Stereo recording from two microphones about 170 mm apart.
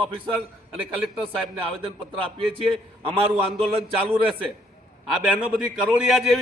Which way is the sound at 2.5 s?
35° right (ahead or behind).